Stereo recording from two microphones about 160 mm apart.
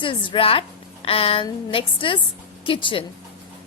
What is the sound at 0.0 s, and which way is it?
A woman's voice, 35° left (ahead or behind).